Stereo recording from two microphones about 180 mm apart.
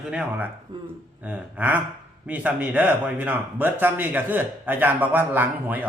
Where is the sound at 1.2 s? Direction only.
10° right (ahead or behind).